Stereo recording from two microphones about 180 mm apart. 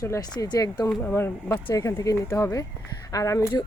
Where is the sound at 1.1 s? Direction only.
15° left (ahead or behind).